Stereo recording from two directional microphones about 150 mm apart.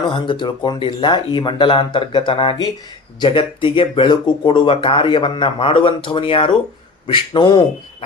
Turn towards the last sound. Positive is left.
turn(degrees=30)  # may be behind; listen again after turning